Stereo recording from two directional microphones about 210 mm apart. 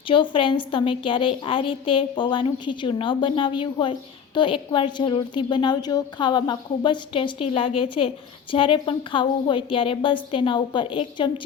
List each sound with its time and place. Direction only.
0.1 s a woman's voice: 25° left (ahead or behind)